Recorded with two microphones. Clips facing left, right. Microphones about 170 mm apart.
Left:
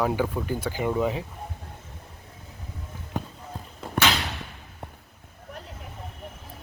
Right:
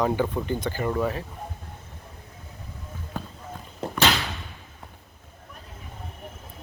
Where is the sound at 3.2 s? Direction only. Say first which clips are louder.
Left 3 dB; 20° left (ahead or behind).